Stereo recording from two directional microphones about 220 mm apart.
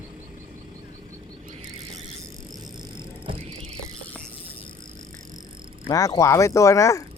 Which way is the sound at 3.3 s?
25° right (ahead or behind).